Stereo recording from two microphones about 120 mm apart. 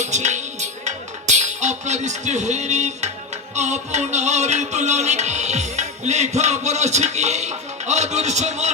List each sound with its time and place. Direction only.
0.0 s music: 75° right (ahead or behind)